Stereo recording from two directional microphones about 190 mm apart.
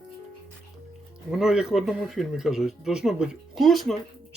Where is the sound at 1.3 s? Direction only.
5° right (ahead or behind).